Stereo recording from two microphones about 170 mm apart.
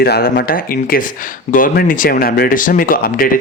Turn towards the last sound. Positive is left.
turn(degrees=55)  # may be behind; listen again after turning